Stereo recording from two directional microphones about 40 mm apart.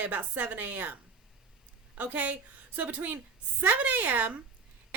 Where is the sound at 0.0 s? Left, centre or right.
Right.